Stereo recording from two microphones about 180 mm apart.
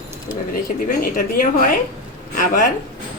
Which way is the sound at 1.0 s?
50° left (ahead or behind).